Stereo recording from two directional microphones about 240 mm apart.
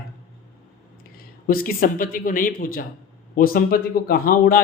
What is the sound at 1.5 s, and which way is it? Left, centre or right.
Speech, left.